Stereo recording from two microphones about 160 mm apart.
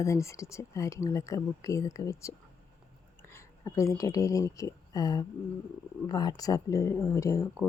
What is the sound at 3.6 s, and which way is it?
Speech, 20° left (ahead or behind).